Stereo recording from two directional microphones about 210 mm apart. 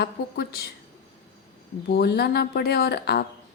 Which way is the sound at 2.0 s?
50° left (ahead or behind).